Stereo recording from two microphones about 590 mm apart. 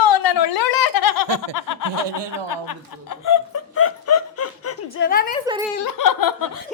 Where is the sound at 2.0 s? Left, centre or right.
Right.